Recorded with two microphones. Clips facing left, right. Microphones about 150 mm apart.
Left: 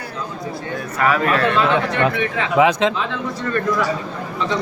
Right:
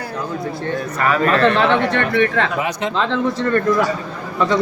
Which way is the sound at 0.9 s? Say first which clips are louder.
Right 1 dB; 5° left (ahead or behind).